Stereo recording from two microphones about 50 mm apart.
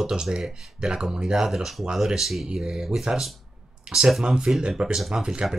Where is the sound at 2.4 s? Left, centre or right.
Centre.